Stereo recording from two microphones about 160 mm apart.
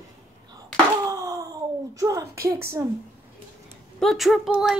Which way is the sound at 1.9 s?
20° right (ahead or behind).